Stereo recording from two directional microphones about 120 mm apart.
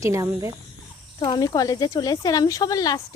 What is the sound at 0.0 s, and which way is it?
Speech, 25° right (ahead or behind).